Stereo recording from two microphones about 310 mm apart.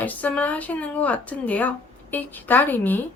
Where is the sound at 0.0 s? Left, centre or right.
Centre.